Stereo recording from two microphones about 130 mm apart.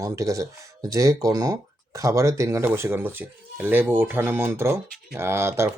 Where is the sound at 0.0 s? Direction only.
25° right (ahead or behind).